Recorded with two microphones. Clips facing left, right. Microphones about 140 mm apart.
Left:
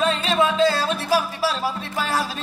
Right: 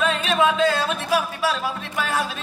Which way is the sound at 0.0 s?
35° left (ahead or behind).